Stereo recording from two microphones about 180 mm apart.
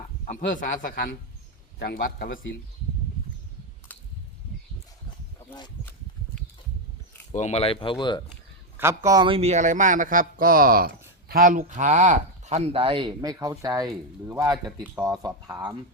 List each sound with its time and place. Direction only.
0.3 s a man's voice: 45° left (ahead or behind)
7.3 s speech: 40° left (ahead or behind)
9.0 s speech: 25° right (ahead or behind)